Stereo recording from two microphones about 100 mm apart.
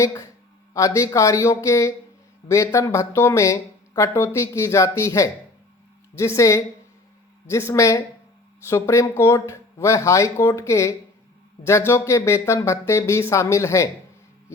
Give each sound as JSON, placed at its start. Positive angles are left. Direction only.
{"t": 0.0, "sound": "speech", "side_deg": 30}